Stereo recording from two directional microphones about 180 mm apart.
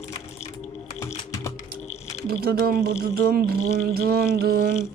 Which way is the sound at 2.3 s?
60° right (ahead or behind).